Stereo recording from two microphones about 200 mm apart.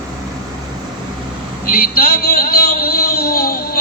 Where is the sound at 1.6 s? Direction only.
45° left (ahead or behind).